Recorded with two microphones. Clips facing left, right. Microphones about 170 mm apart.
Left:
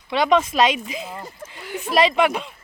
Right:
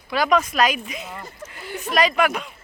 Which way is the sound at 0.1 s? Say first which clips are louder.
Left 2 dB; 25° left (ahead or behind).